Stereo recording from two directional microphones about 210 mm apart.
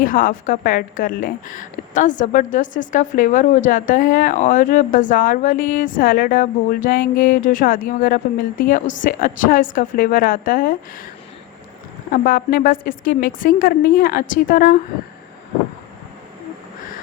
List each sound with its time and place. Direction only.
0.0 s a woman's voice: 40° left (ahead or behind)
12.1 s a woman's voice: 40° left (ahead or behind)